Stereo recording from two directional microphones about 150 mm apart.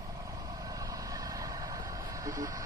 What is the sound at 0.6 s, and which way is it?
Vehicle, 25° right (ahead or behind).